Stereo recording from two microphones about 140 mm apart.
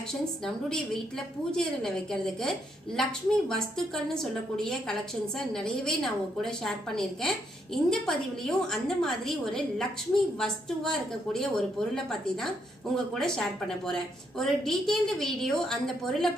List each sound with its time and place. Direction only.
0.1 s a woman's voice: 5° left (ahead or behind)